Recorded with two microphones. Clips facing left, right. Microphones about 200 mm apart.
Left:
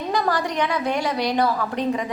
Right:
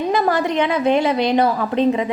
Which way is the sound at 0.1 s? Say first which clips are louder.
Right 3 dB; 20° right (ahead or behind).